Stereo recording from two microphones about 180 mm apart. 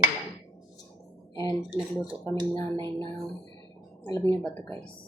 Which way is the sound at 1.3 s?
20° left (ahead or behind).